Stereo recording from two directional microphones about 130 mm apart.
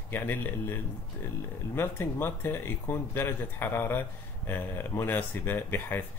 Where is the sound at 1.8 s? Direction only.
15° left (ahead or behind).